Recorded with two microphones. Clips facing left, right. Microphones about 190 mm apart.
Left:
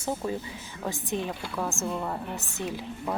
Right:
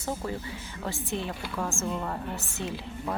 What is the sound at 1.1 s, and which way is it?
A woman's voice, 15° left (ahead or behind).